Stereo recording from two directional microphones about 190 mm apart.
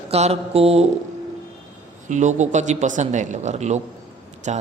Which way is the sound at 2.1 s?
40° right (ahead or behind).